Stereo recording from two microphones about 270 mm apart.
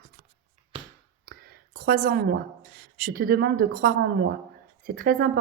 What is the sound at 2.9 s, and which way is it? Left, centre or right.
Speech, right.